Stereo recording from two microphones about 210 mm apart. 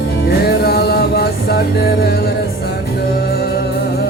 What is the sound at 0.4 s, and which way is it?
Music, 50° left (ahead or behind).